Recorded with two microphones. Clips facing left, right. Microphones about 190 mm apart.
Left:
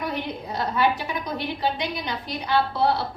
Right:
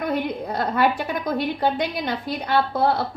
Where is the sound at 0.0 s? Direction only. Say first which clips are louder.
Right 5 dB; 50° right (ahead or behind).